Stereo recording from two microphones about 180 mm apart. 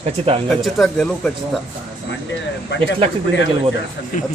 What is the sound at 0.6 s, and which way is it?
Speech, centre (ahead or behind).